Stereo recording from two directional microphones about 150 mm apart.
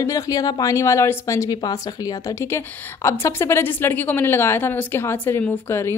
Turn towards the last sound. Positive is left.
turn(degrees=15)  # may be behind; listen again after turning